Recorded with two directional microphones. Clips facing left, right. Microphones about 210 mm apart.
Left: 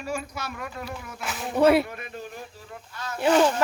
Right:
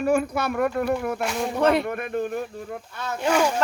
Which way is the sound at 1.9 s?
55° right (ahead or behind).